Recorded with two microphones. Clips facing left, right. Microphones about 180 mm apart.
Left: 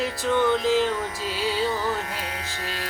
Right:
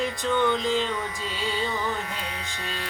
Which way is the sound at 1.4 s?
5° left (ahead or behind).